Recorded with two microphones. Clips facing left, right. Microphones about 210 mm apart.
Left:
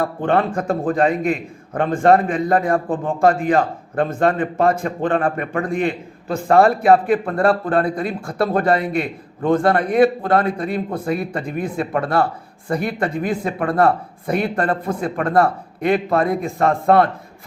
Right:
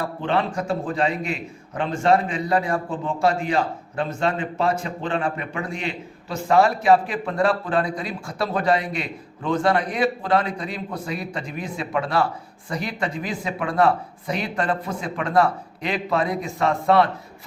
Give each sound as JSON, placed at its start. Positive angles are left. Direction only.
{"t": 0.0, "sound": "a man's voice", "side_deg": 50}